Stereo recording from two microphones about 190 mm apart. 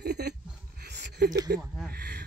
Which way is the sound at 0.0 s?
60° right (ahead or behind).